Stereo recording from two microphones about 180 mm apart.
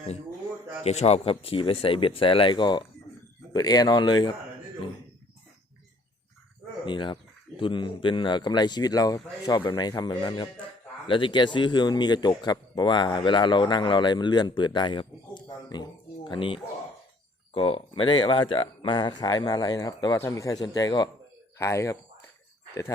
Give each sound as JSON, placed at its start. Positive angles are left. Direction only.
{"t": 0.9, "sound": "speech", "side_deg": 35}
{"t": 6.8, "sound": "speech", "side_deg": 25}